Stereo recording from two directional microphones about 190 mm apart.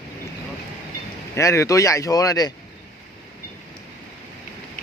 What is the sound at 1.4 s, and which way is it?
Speech, 15° left (ahead or behind).